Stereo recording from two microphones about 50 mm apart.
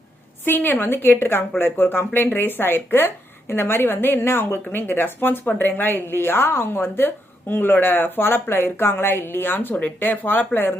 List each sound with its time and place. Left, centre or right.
0.4 s a woman's voice: left
9.7 s speech: left